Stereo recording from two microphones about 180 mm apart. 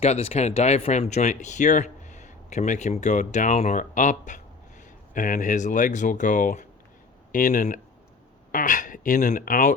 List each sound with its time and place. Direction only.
0.0 s speech: 35° left (ahead or behind)